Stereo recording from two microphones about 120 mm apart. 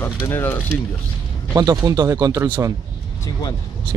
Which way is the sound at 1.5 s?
30° right (ahead or behind).